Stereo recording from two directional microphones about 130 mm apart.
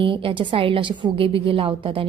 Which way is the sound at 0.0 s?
40° right (ahead or behind).